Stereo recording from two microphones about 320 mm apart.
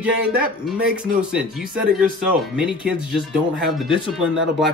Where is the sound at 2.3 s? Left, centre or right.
Centre.